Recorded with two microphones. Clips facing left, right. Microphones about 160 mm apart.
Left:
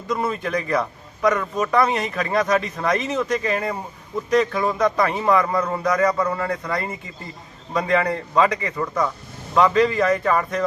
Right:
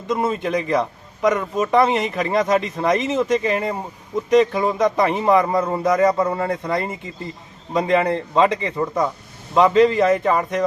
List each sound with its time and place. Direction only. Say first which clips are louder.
0.1 s a man's voice: right 3 dB; 25° right (ahead or behind)